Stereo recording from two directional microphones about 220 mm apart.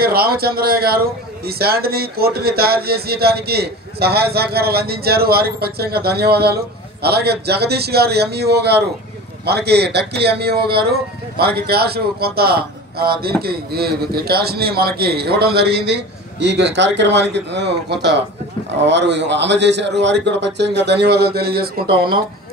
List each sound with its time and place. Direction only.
0.0 s a man's voice: 45° right (ahead or behind)